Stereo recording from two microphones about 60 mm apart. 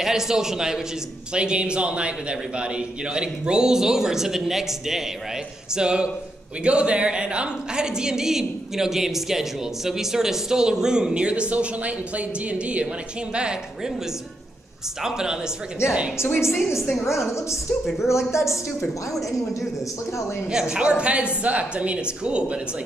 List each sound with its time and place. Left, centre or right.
0.0 s a woman's voice: centre
15.0 s a woman's voice: centre
15.8 s a woman's voice: left
17.3 s a woman's voice: left
18.8 s a woman's voice: centre
20.4 s a woman's voice: centre